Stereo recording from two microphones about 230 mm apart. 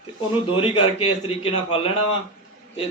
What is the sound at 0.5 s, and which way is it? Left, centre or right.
Speech, left.